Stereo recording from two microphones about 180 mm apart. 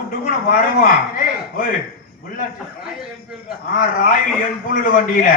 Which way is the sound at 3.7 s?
50° left (ahead or behind).